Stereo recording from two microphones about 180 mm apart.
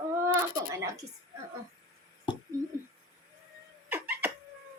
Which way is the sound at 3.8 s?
10° right (ahead or behind).